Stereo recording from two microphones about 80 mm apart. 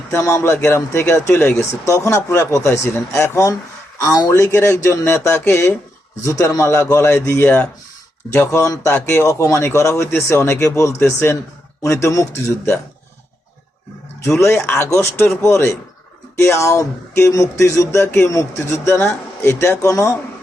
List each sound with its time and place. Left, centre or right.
0.1 s speech: left
6.2 s speech: left
8.9 s speech: left
9.2 s speech: left
14.3 s speech: left